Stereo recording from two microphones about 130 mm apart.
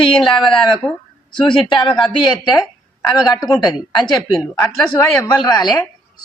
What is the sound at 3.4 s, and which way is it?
Speech, 30° left (ahead or behind).